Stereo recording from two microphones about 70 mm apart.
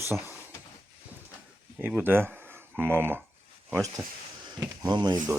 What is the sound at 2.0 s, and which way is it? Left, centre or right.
Speech, right.